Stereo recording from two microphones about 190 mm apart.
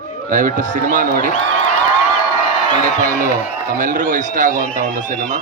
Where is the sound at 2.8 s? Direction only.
45° right (ahead or behind).